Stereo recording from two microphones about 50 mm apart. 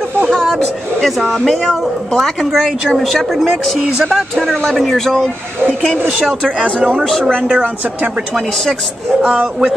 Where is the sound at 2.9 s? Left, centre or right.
Centre.